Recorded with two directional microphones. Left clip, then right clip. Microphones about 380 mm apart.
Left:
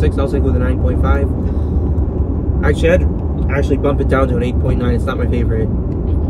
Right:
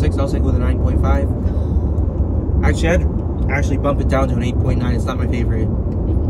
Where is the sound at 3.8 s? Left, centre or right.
Centre.